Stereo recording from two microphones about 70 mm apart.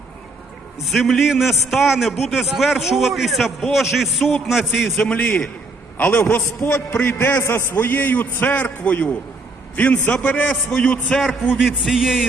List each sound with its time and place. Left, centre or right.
0.9 s a man's voice: centre
5.0 s a man's voice: left
10.5 s a man's voice: centre
11.6 s a man's voice: centre